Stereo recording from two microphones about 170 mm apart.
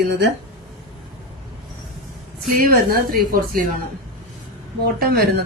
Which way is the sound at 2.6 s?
60° right (ahead or behind).